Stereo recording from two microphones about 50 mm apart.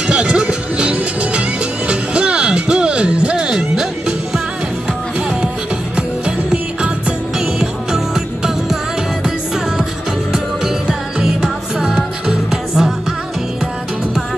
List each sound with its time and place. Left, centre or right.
0.1 s music: right
3.4 s music: centre
5.9 s music: centre
7.6 s music: centre
10.3 s music: centre